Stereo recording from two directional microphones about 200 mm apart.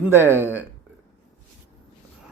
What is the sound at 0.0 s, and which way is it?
Speech, 10° right (ahead or behind).